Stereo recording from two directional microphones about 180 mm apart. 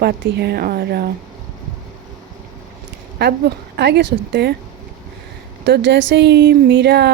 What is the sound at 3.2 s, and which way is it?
Speech, 65° right (ahead or behind).